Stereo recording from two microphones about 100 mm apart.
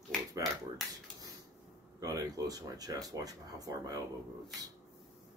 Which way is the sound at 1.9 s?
35° right (ahead or behind).